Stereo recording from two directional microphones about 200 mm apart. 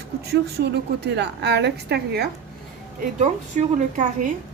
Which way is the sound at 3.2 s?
35° right (ahead or behind).